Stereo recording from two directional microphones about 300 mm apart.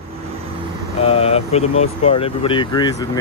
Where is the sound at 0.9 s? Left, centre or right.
Centre.